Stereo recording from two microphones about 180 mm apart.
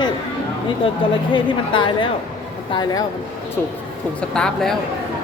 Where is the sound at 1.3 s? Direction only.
25° left (ahead or behind).